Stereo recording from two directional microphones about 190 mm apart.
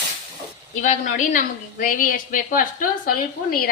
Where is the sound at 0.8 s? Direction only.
40° left (ahead or behind).